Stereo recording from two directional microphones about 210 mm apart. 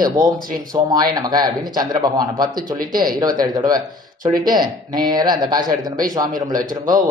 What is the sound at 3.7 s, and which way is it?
Speech, 40° right (ahead or behind).